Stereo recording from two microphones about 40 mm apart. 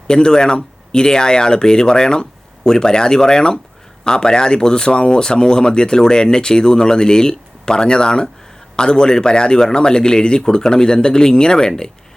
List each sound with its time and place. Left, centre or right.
0.1 s speech: centre